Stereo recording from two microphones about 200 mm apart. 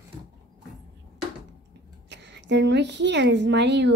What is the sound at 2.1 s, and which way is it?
A woman's voice, 60° right (ahead or behind).